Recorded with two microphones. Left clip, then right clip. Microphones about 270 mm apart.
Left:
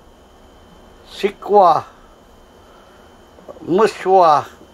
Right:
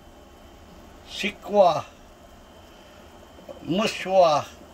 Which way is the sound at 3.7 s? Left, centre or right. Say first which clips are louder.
Left 10 dB; left.